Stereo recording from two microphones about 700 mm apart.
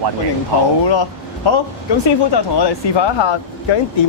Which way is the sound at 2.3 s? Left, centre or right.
Left.